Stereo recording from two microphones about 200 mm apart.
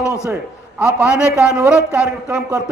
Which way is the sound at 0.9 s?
5° right (ahead or behind).